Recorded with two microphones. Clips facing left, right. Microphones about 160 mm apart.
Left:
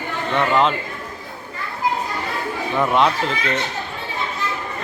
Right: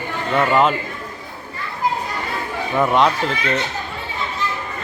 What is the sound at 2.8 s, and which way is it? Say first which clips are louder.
Speech: right 2 dB; centre (ahead or behind).